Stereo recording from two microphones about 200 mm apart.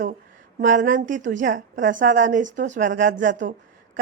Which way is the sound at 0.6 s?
40° right (ahead or behind).